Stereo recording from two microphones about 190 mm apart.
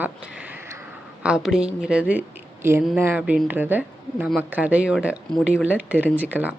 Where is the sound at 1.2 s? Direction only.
5° right (ahead or behind).